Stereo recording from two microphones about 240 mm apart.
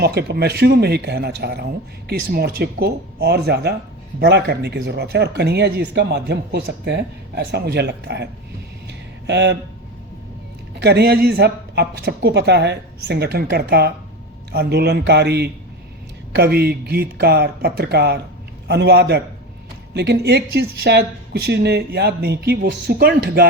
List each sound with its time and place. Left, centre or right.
0.0 s speech: right
8.9 s a sound: right
10.8 s speech: right